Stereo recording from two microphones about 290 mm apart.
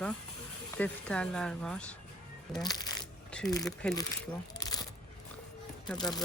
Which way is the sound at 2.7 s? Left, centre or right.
Centre.